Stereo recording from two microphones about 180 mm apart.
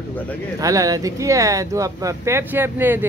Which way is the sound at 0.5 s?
20° right (ahead or behind).